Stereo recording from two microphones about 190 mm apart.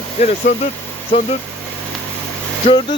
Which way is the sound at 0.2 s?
35° left (ahead or behind).